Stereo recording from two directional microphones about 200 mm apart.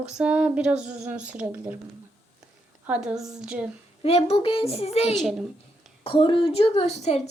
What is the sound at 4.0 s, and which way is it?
A child's voice, 30° left (ahead or behind).